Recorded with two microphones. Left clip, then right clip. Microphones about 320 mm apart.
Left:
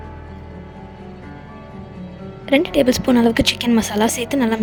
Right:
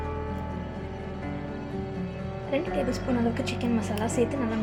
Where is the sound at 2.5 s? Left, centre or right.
Left.